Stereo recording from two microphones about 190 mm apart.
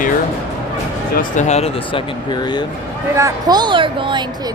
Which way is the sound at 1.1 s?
45° left (ahead or behind).